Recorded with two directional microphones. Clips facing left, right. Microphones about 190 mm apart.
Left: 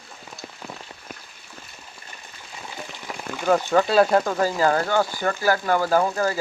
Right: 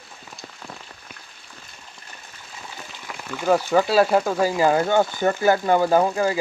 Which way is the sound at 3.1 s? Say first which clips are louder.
Left 2 dB; 30° left (ahead or behind).